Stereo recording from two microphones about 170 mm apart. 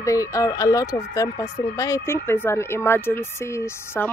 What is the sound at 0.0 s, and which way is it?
Speech, 20° left (ahead or behind).